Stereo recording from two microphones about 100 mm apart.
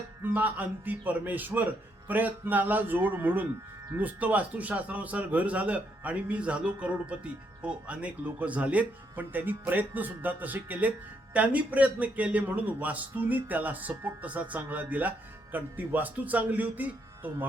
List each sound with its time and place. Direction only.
0.2 s speech: 20° right (ahead or behind)